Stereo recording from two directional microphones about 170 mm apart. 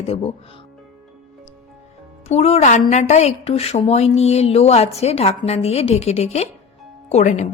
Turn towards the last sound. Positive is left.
turn(degrees=45)  # may be behind; listen again after turning